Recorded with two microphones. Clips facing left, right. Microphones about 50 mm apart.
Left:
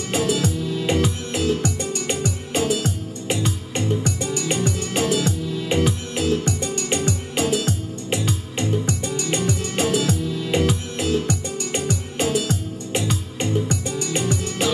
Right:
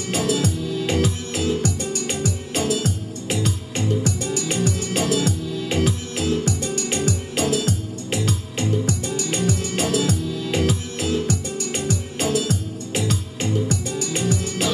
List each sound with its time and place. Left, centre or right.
0.1 s music: centre